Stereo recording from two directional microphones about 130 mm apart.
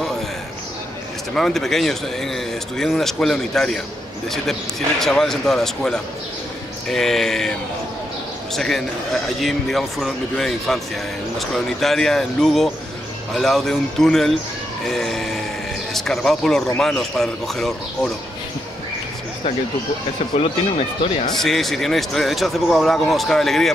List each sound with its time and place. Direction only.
1.3 s speech: 5° left (ahead or behind)
8.5 s speech: centre (ahead or behind)
20.3 s speech: 50° left (ahead or behind)
21.3 s speech: centre (ahead or behind)